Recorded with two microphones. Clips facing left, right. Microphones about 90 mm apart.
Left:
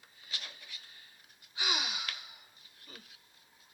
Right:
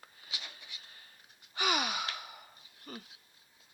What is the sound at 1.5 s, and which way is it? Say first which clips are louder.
Gasp: right 5 dB; 55° right (ahead or behind).